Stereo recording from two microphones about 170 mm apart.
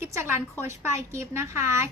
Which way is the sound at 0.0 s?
15° right (ahead or behind).